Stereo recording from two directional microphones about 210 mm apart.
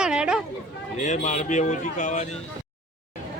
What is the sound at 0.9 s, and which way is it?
Speech, 35° left (ahead or behind).